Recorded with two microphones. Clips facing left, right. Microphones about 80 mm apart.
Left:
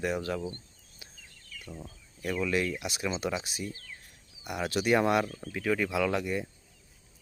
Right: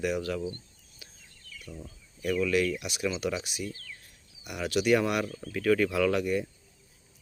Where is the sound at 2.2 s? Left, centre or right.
Left.